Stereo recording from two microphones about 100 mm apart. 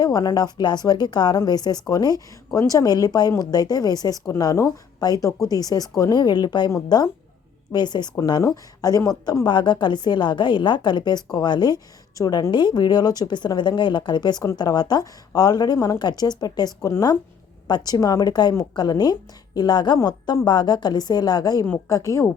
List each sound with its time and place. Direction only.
0.0 s a woman's voice: 40° left (ahead or behind)